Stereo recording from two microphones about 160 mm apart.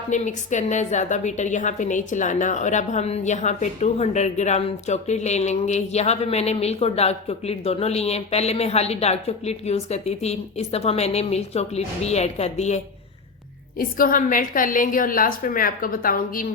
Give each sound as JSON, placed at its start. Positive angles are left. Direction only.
{"t": 0.1, "sound": "a woman's voice", "side_deg": 50}
{"t": 13.7, "sound": "a woman's voice", "side_deg": 60}